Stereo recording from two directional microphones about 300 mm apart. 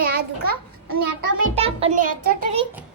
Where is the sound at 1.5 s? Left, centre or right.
Centre.